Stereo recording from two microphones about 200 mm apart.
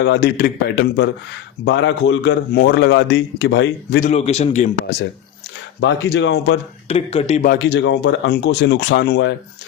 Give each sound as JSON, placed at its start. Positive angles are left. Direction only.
{"t": 0.0, "sound": "speech", "side_deg": 60}
{"t": 2.6, "sound": "speech", "side_deg": 55}
{"t": 4.0, "sound": "a man's voice", "side_deg": 30}
{"t": 5.8, "sound": "speech", "side_deg": 60}
{"t": 6.8, "sound": "a man's voice", "side_deg": 30}
{"t": 7.5, "sound": "speech", "side_deg": 60}